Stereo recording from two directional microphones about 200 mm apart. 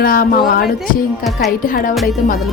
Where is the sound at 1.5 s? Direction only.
45° left (ahead or behind).